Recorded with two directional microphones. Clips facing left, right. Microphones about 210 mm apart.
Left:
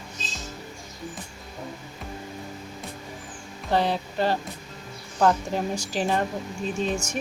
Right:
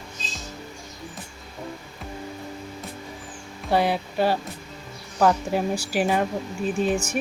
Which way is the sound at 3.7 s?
10° right (ahead or behind).